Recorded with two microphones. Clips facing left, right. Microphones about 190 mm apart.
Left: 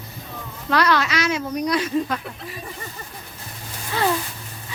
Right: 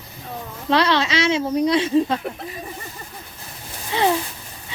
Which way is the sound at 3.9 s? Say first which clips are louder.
Right 2 dB; 20° right (ahead or behind).